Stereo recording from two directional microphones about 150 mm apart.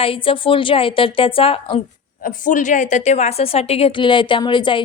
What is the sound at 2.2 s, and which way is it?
A woman's voice, 60° left (ahead or behind).